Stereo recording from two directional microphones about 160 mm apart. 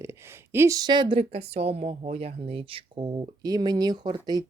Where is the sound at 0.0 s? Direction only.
15° right (ahead or behind).